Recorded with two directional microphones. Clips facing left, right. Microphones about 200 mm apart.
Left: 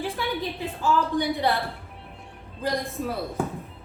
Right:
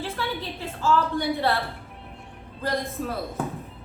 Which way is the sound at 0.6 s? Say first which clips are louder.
Right 2 dB; 15° left (ahead or behind).